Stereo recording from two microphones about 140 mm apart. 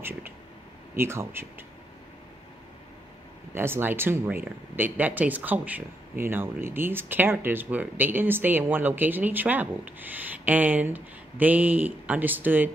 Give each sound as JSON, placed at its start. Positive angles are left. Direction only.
{"t": 0.9, "sound": "speech", "side_deg": -15}
{"t": 3.5, "sound": "speech", "side_deg": -15}